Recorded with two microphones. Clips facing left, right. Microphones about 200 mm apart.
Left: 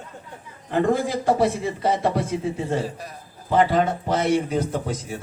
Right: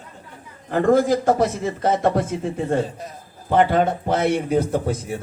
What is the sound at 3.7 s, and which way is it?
Speech, 55° right (ahead or behind).